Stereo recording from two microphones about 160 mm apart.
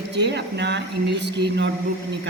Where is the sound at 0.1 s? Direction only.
90° right.